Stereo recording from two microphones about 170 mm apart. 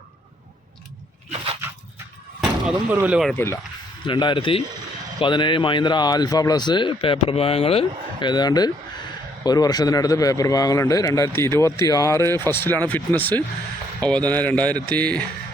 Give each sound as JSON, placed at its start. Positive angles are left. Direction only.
{"t": 2.4, "sound": "speech", "side_deg": -5}
{"t": 3.3, "sound": "speech", "side_deg": 15}
{"t": 4.0, "sound": "a man's voice", "side_deg": 30}